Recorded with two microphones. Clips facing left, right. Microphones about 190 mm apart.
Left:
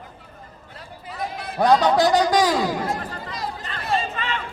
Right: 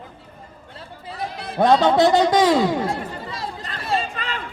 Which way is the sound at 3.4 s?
25° right (ahead or behind).